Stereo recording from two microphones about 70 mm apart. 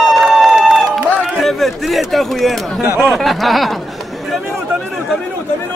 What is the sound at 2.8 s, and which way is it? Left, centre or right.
Speech, right.